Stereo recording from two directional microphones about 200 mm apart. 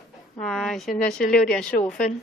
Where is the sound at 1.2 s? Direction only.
45° left (ahead or behind).